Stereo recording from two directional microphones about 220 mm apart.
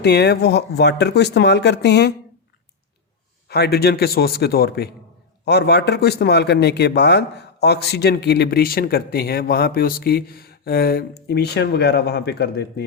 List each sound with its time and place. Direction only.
0.0 s a man's voice: 50° left (ahead or behind)
3.5 s a man's voice: 45° left (ahead or behind)